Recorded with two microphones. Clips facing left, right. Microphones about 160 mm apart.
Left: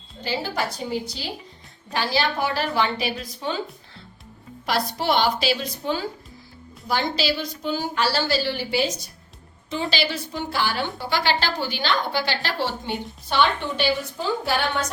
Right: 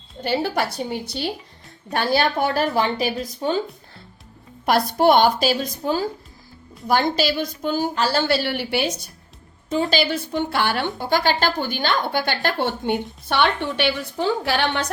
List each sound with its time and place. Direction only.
0.2 s a woman's voice: 60° right (ahead or behind); by 3.6 s 40° right (ahead or behind)
4.6 s a woman's voice: 55° right (ahead or behind)
9.6 s a woman's voice: 45° right (ahead or behind); by 10.8 s 60° right (ahead or behind)
11.1 s a woman's voice: 50° right (ahead or behind); by 14.8 s 75° right (ahead or behind)